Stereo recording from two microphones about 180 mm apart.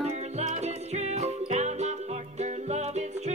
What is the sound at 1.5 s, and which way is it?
Music, 40° right (ahead or behind).